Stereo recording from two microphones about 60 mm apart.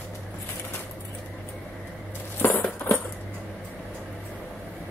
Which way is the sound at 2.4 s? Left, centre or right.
Left.